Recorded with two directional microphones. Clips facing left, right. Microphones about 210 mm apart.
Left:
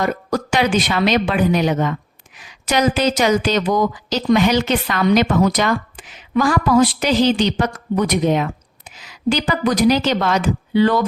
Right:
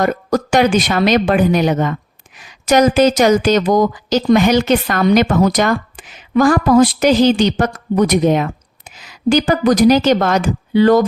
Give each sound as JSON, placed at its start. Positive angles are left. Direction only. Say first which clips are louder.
{"t": 0.0, "sound": "speech", "louder": "right 4 dB", "side_deg": -45}